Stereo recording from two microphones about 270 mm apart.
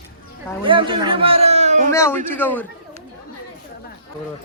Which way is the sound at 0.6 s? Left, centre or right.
Centre.